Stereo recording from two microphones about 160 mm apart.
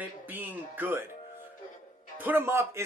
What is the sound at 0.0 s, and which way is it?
Speech, 10° right (ahead or behind).